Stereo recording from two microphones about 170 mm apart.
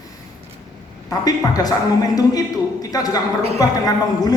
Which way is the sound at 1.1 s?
20° left (ahead or behind).